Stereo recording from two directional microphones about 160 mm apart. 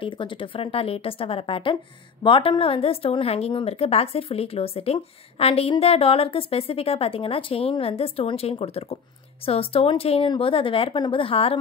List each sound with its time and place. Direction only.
0.0 s a woman's voice: 30° left (ahead or behind)